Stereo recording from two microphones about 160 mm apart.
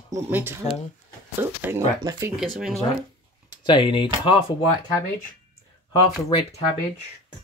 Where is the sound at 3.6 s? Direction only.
30° left (ahead or behind).